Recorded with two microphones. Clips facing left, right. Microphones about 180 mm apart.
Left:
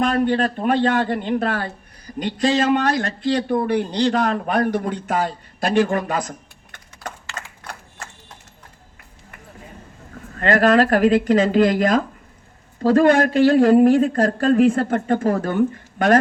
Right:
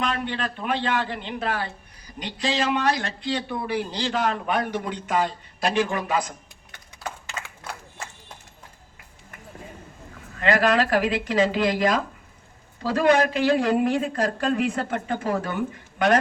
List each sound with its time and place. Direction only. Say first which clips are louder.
0.0 s speech: left 9 dB; 45° left (ahead or behind)
10.3 s speech: left 5 dB; 45° left (ahead or behind)